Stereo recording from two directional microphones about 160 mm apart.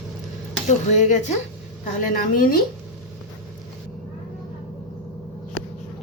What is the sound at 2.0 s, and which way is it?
Speech, 60° left (ahead or behind).